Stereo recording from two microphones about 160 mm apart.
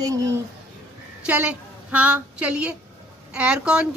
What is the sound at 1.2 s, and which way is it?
A woman's voice, 10° right (ahead or behind).